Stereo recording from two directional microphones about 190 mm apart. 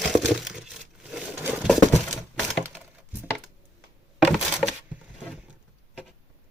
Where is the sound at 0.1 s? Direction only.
Centre (ahead or behind).